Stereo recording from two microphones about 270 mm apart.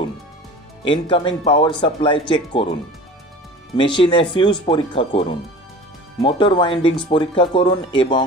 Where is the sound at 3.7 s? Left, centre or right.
Centre.